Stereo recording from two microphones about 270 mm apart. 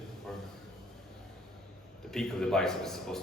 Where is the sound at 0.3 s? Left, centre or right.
Centre.